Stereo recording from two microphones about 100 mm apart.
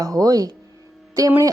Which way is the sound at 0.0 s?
35° right (ahead or behind).